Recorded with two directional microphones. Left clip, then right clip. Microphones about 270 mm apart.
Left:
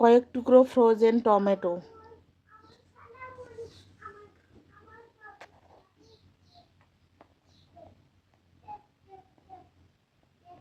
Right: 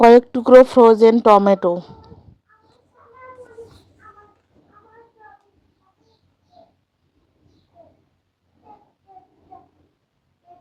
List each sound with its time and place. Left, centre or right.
0.0 s speech: right